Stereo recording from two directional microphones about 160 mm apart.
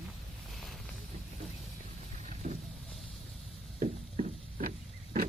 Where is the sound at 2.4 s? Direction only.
55° right (ahead or behind).